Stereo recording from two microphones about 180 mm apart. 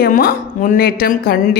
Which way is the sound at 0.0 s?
55° left (ahead or behind).